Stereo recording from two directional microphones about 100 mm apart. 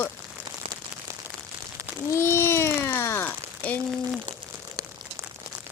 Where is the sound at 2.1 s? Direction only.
25° left (ahead or behind).